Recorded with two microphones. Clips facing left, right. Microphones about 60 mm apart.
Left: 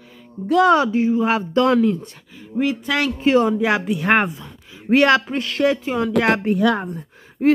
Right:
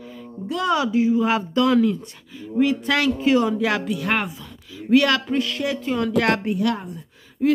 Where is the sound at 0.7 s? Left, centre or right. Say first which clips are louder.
Left 3 dB; left.